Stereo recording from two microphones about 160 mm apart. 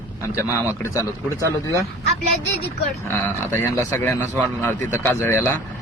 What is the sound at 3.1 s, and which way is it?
Speech, 15° left (ahead or behind).